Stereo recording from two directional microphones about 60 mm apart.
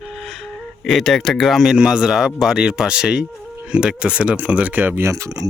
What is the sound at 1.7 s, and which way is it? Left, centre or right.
Speech, centre.